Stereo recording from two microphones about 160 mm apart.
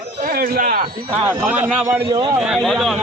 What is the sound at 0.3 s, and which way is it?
Speech, 70° right (ahead or behind).